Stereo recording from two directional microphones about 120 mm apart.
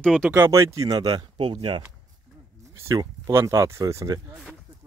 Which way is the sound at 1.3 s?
45° right (ahead or behind).